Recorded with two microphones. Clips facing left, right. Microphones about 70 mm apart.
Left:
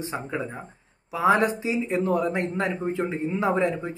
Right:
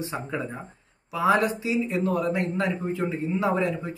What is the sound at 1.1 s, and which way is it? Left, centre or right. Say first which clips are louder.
Speech: left 1 dB; left.